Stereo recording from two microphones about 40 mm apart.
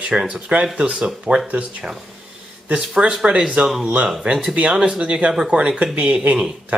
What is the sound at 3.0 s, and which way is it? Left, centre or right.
Speech, right.